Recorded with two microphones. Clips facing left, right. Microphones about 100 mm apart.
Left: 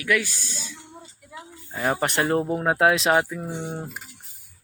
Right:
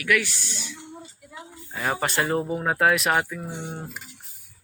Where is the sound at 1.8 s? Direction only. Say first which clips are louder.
Left 2 dB; 20° left (ahead or behind).